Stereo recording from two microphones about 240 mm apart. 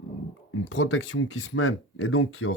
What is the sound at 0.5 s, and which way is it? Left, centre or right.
Speech, left.